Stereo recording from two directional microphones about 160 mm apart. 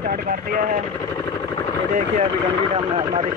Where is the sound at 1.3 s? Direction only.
25° left (ahead or behind).